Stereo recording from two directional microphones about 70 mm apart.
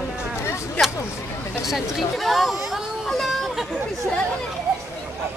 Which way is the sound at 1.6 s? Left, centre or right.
Centre.